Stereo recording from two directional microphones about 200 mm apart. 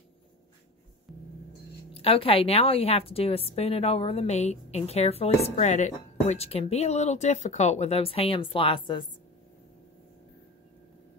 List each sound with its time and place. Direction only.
1.9 s a woman's voice: 30° left (ahead or behind)